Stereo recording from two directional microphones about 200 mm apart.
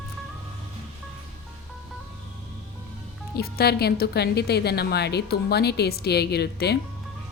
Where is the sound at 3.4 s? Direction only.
50° left (ahead or behind).